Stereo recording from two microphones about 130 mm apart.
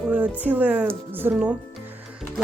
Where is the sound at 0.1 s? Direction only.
10° right (ahead or behind).